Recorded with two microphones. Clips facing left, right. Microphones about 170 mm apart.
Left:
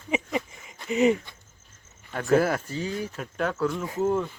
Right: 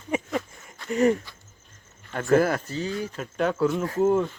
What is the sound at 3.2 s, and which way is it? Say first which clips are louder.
Speech: right 4 dB; centre (ahead or behind).